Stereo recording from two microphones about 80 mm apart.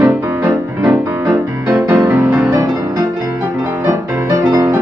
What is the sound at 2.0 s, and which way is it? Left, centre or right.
Music, right.